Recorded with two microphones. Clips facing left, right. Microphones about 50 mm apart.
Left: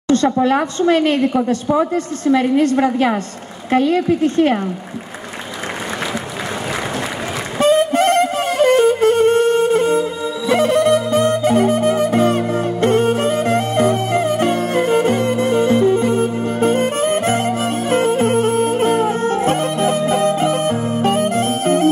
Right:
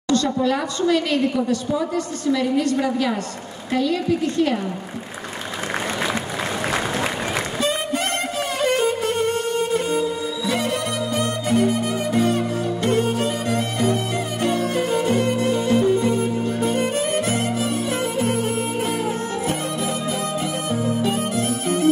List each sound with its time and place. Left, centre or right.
0.1 s a woman's voice: left
7.5 s music: left